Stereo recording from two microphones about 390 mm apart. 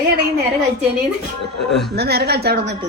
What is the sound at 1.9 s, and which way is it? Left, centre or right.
Speech, right.